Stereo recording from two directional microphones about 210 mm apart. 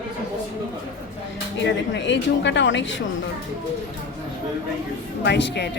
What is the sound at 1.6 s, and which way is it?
A woman's voice, 60° left (ahead or behind).